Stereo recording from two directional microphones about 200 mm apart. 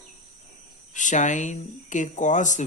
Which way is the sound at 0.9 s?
40° left (ahead or behind).